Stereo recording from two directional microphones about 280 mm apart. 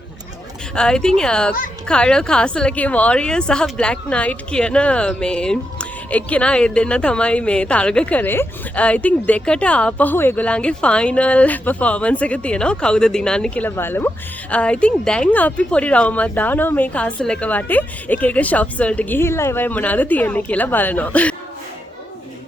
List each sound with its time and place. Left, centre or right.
0.8 s a woman's voice: centre